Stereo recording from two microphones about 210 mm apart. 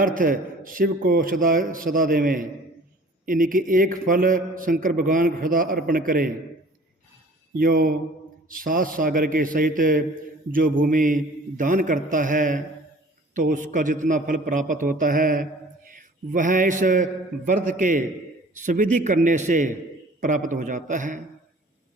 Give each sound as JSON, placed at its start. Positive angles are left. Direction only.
{"t": 0.0, "sound": "a man's voice", "side_deg": -40}
{"t": 7.6, "sound": "mantra", "side_deg": -40}
{"t": 8.4, "sound": "a man's voice", "side_deg": -40}